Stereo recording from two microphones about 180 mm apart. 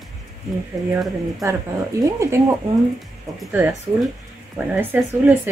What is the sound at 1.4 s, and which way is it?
Speech, 15° right (ahead or behind).